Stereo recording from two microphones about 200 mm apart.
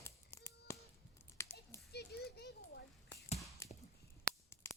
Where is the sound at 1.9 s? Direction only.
55° left (ahead or behind).